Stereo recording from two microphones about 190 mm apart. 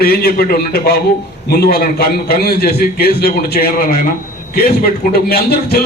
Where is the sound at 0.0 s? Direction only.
55° left (ahead or behind).